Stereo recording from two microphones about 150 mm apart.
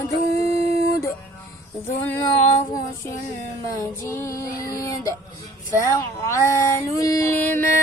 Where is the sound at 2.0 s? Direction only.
15° left (ahead or behind).